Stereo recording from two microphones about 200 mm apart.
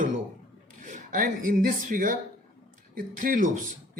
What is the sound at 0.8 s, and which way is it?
Speech, 40° right (ahead or behind).